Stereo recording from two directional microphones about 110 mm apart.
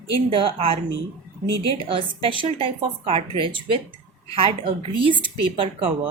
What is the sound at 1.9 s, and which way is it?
A woman's voice, 55° right (ahead or behind).